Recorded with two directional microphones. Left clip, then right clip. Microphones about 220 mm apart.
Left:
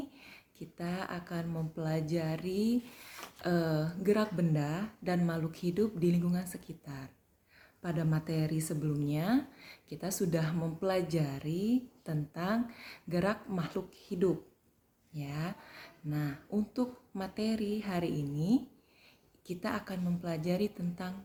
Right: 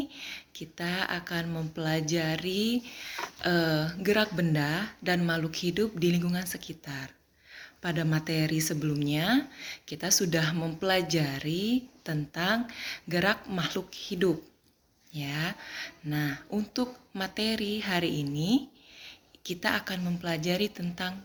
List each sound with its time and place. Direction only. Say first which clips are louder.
0.6 s speech: right 8 dB; 5° left (ahead or behind)
11.4 s speech: right 4 dB; 35° right (ahead or behind)
12.0 s speech: right 7 dB; 5° left (ahead or behind)